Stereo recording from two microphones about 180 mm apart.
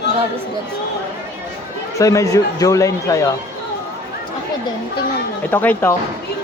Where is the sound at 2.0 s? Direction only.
15° left (ahead or behind).